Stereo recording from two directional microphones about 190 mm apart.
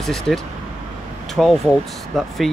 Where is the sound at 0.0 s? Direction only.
Centre (ahead or behind).